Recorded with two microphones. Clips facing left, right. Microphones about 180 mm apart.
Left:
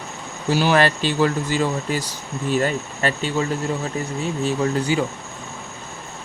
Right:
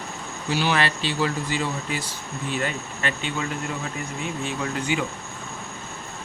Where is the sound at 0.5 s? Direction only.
45° left (ahead or behind).